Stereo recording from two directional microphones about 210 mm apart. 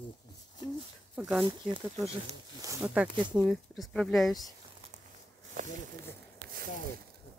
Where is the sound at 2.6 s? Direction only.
10° right (ahead or behind).